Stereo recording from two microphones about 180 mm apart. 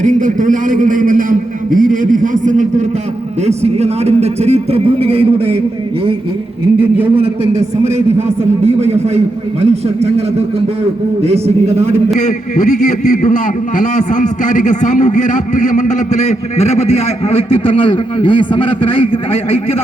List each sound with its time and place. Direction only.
0.0 s a man's voice: 45° right (ahead or behind)
7.2 s a man's voice: 35° right (ahead or behind)
12.2 s a man's voice: 40° left (ahead or behind)